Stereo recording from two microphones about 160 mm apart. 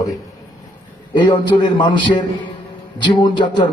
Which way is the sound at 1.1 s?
30° left (ahead or behind).